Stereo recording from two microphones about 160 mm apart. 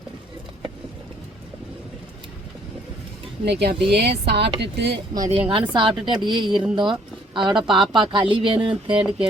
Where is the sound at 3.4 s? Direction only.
90° right.